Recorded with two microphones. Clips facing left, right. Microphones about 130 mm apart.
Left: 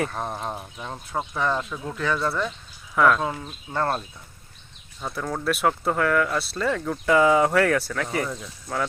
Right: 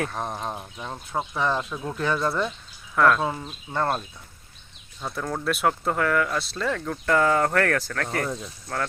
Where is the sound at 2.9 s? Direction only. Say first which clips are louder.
Even; centre (ahead or behind).